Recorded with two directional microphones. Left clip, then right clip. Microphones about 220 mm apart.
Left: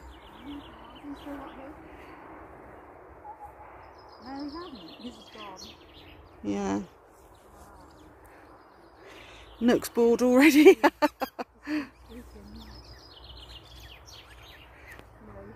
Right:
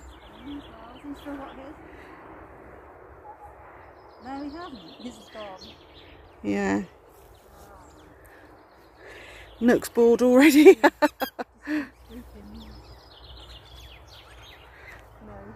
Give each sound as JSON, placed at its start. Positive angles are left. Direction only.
{"t": 0.4, "sound": "bird", "side_deg": 35}
{"t": 4.5, "sound": "speech", "side_deg": 50}
{"t": 6.5, "sound": "speech", "side_deg": -5}
{"t": 9.0, "sound": "a sound", "side_deg": 0}